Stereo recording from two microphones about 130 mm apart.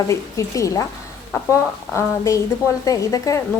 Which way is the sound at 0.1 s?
25° left (ahead or behind).